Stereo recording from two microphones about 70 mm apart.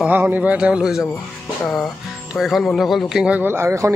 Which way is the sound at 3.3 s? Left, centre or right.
Right.